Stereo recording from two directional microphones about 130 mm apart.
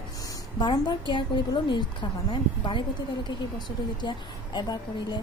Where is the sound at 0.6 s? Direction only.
35° left (ahead or behind).